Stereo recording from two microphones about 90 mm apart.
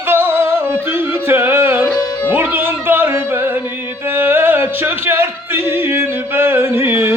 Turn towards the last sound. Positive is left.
turn(degrees=-25)  # may be behind; listen again after turning